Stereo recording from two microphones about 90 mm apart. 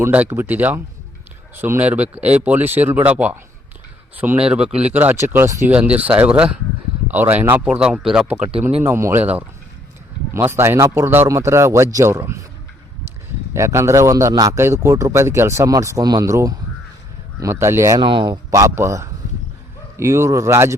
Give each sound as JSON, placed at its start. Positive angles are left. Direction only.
{"t": 0.3, "sound": "speech", "side_deg": -25}
{"t": 1.8, "sound": "speech", "side_deg": -15}
{"t": 4.4, "sound": "speech", "side_deg": -10}
{"t": 5.1, "sound": "speech", "side_deg": -25}
{"t": 5.6, "sound": "speech", "side_deg": -15}
{"t": 8.6, "sound": "speech", "side_deg": -25}
{"t": 10.3, "sound": "speech", "side_deg": -30}
{"t": 13.5, "sound": "speech", "side_deg": -35}
{"t": 17.9, "sound": "speech", "side_deg": -65}
{"t": 18.5, "sound": "speech", "side_deg": -30}